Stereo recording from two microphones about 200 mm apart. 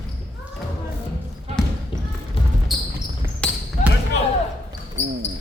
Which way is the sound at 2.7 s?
Centre (ahead or behind).